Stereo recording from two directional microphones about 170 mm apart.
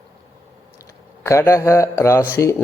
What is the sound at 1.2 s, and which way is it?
A man's voice, 15° left (ahead or behind).